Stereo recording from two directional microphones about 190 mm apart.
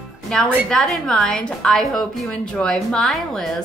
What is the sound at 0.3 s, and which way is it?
A woman's voice, 5° left (ahead or behind).